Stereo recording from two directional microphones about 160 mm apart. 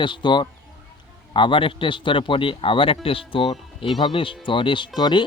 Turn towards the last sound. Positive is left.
turn(degrees=30)  # may be behind; listen again after turning